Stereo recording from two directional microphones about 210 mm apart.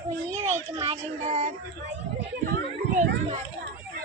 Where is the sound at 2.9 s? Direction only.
35° right (ahead or behind).